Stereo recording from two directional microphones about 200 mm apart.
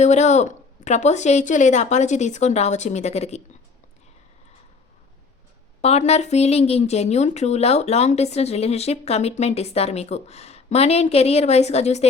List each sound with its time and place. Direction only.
0.0 s speech: 35° left (ahead or behind)
5.8 s speech: 30° left (ahead or behind)